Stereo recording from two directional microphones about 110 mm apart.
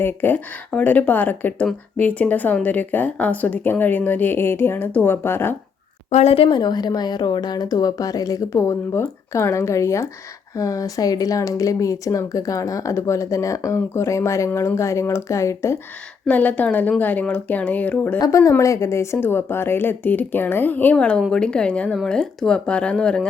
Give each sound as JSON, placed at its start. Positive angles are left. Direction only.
{"t": 0.0, "sound": "speech", "side_deg": 20}
{"t": 6.1, "sound": "speech", "side_deg": 80}
{"t": 6.6, "sound": "speech", "side_deg": 40}
{"t": 16.2, "sound": "speech", "side_deg": 15}
{"t": 18.2, "sound": "speech", "side_deg": 30}